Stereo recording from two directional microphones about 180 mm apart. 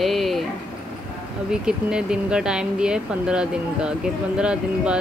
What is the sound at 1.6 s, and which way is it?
Speech, 5° right (ahead or behind).